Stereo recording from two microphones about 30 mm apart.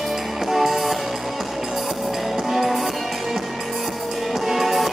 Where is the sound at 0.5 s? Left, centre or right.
Centre.